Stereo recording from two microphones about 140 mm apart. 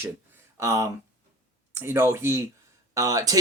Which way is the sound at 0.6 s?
25° right (ahead or behind).